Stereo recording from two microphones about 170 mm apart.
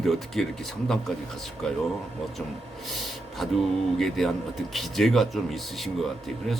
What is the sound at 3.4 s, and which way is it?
Speech, centre (ahead or behind).